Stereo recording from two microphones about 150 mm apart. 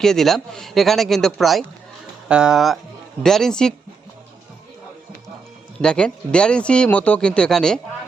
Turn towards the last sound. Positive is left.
turn(degrees=5)  # may be behind; listen again after turning